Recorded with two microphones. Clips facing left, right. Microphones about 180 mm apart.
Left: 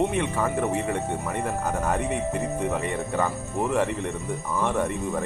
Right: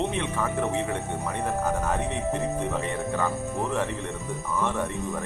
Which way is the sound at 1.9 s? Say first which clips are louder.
Left 1 dB; 10° left (ahead or behind).